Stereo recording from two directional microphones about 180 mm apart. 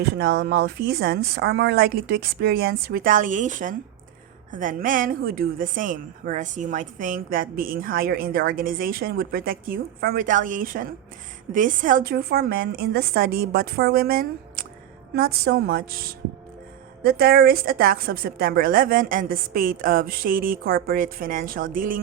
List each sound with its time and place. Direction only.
0.0 s speech: 75° right (ahead or behind); by 22.0 s 50° right (ahead or behind)